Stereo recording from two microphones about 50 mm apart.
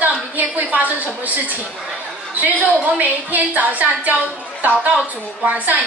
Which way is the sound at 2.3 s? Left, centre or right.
Right.